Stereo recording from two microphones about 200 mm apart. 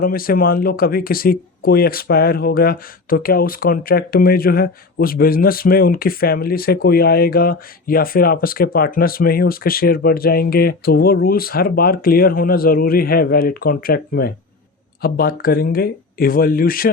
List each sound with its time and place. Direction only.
0.0 s speech: 45° left (ahead or behind)